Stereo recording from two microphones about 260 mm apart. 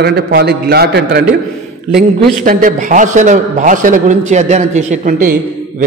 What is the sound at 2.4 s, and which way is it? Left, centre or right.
A man's voice, right.